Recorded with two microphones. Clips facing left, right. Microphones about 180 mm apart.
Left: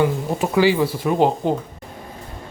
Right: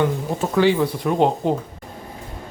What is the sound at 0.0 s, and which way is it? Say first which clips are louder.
Speech: left 1 dB; 10° left (ahead or behind).